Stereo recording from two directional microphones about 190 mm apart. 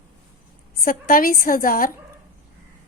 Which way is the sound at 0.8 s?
50° left (ahead or behind).